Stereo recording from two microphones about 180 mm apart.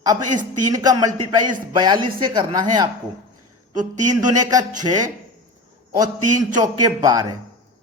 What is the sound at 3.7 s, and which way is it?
Speech, 45° right (ahead or behind).